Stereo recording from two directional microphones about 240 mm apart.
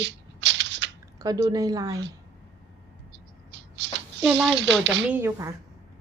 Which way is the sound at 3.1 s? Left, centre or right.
Right.